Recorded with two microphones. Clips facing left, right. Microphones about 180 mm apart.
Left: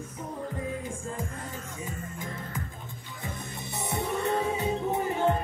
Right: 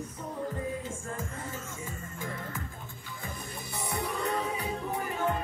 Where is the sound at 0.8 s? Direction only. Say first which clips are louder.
Left 2 dB; 15° left (ahead or behind).